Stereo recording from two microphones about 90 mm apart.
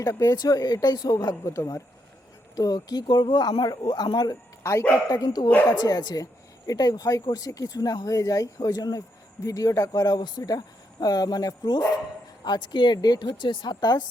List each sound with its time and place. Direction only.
0.0 s speech: 35° left (ahead or behind)
2.6 s speech: 45° left (ahead or behind)
4.6 s speech: 30° left (ahead or behind)
5.0 s speech: 45° left (ahead or behind)